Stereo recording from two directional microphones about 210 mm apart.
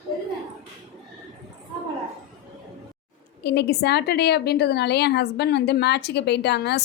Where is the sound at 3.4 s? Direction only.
50° left (ahead or behind).